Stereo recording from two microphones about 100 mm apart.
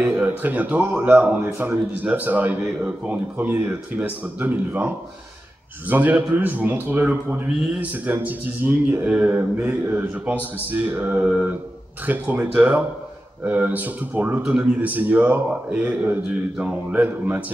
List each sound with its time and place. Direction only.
0.0 s a man's voice: 15° right (ahead or behind)
7.6 s a man's voice: 10° right (ahead or behind)